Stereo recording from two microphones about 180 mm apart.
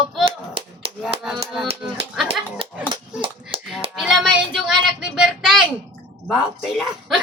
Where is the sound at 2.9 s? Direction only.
30° right (ahead or behind).